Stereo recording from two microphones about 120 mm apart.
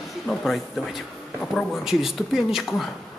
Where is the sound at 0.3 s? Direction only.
Centre (ahead or behind).